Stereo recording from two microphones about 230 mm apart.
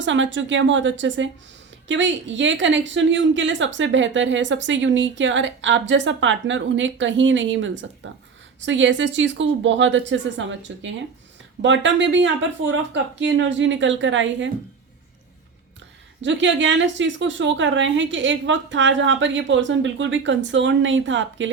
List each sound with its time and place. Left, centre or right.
0.0 s a woman's voice: right
16.2 s a woman's voice: right